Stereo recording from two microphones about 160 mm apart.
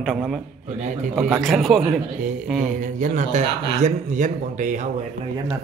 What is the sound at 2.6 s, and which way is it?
A man's voice, 50° right (ahead or behind).